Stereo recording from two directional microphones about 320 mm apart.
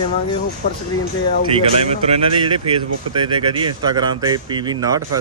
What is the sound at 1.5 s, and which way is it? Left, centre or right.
Speech, centre.